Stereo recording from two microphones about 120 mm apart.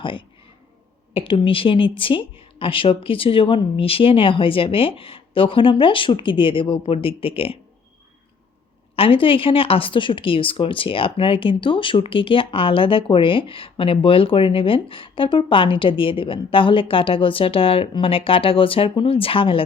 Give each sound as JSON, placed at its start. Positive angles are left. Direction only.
{"t": 0.0, "sound": "a woman's voice", "side_deg": 45}
{"t": 9.0, "sound": "a woman's voice", "side_deg": 50}